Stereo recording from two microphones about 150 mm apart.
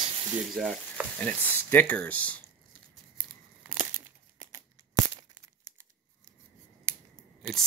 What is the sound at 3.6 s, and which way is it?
Tearing, 15° right (ahead or behind).